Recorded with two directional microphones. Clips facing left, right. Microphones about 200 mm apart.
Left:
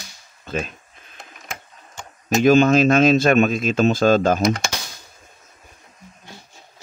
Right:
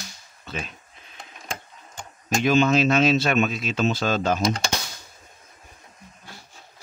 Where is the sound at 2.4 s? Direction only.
50° left (ahead or behind).